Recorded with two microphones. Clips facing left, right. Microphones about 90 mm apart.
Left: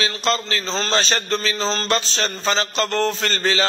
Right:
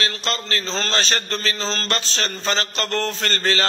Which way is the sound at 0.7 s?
20° left (ahead or behind).